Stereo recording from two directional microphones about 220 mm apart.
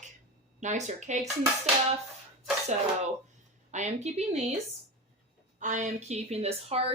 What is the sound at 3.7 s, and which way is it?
Speech, 30° right (ahead or behind).